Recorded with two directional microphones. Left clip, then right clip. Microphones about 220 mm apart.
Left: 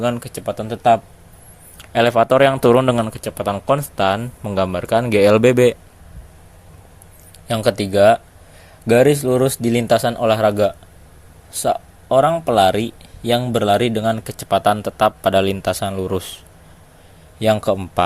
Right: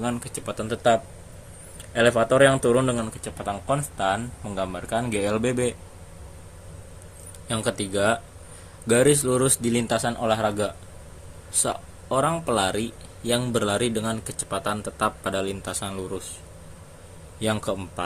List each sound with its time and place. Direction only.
0.0 s speech: 40° left (ahead or behind)
1.8 s speech: 40° left (ahead or behind)
7.4 s a man's voice: 30° left (ahead or behind)
11.5 s a man's voice: 25° left (ahead or behind)
17.4 s speech: 30° left (ahead or behind)